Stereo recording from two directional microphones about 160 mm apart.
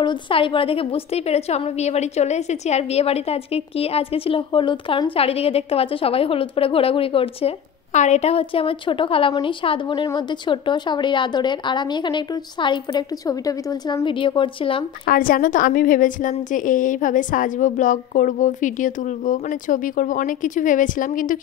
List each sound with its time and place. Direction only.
0.0 s a woman's voice: 30° left (ahead or behind)
7.9 s a woman's voice: 45° left (ahead or behind)
15.0 s a woman's voice: 60° left (ahead or behind)